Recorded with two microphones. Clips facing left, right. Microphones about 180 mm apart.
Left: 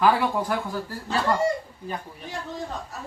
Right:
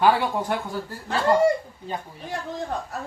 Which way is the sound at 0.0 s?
25° right (ahead or behind).